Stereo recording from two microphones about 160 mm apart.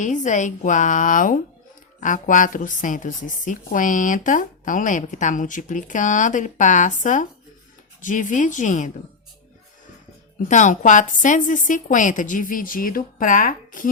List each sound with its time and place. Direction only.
0.0 s a woman's voice: 50° left (ahead or behind)
10.5 s a woman's voice: 50° left (ahead or behind)